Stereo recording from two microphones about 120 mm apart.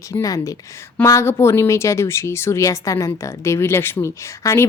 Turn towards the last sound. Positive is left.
turn(degrees=25)  # may be behind; listen again after turning